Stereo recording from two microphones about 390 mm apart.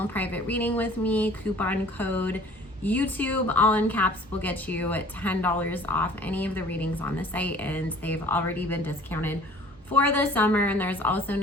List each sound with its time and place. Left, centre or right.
0.0 s a woman's voice: centre